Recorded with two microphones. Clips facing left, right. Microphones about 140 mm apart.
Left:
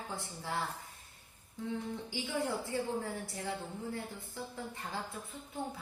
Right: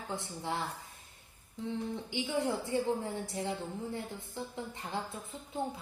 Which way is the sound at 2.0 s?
20° right (ahead or behind).